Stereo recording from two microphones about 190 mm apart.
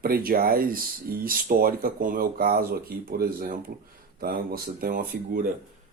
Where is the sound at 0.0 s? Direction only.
50° right (ahead or behind).